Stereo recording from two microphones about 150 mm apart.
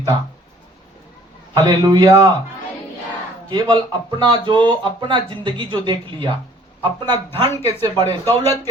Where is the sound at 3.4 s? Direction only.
30° right (ahead or behind).